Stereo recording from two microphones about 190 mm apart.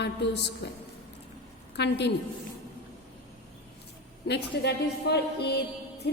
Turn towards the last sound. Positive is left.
turn(degrees=60)  # may be behind; listen again after turning